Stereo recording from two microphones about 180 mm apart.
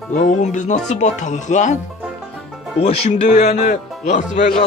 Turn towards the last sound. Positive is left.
turn(degrees=45)  # may be behind; listen again after turning